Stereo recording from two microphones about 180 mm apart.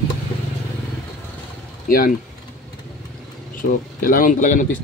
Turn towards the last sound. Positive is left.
turn(degrees=45)  # may be behind; listen again after turning